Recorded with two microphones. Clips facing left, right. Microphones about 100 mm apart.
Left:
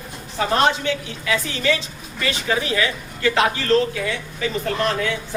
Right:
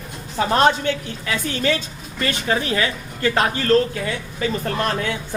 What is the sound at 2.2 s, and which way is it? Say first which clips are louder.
A man's voice: right 1 dB; 45° right (ahead or behind).